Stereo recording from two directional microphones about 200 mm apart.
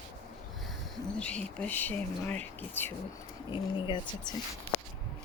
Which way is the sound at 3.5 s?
25° left (ahead or behind).